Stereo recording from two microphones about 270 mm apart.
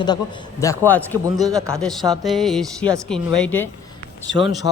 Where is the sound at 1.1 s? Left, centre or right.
Centre.